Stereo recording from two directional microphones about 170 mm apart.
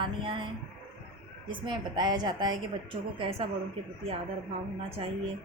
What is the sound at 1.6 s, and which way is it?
Speech, 25° right (ahead or behind).